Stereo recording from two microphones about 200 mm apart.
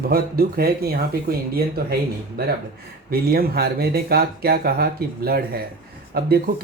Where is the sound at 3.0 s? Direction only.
50° right (ahead or behind).